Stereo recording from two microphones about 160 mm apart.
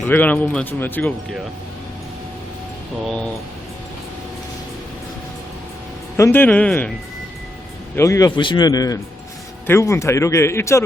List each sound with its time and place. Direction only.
0.0 s speech: 10° left (ahead or behind)
3.0 s speech: 5° left (ahead or behind)
6.1 s speech: 15° left (ahead or behind)
7.9 s speech: 20° left (ahead or behind)